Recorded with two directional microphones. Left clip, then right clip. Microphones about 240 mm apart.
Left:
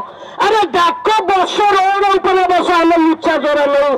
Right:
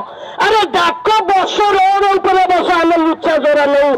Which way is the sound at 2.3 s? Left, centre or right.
Left.